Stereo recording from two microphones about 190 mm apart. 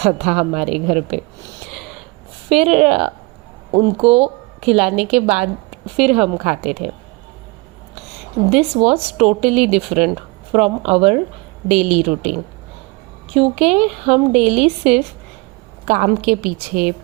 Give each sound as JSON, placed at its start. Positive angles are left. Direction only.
{"t": 0.0, "sound": "speech", "side_deg": -35}
{"t": 2.6, "sound": "speech", "side_deg": -35}
{"t": 8.4, "sound": "speech", "side_deg": -35}
{"t": 15.9, "sound": "a woman's voice", "side_deg": -45}